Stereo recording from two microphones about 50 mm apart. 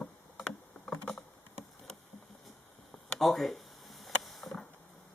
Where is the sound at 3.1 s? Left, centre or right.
Centre.